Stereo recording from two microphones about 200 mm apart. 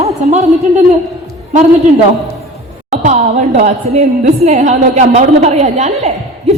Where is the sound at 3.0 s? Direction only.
35° right (ahead or behind).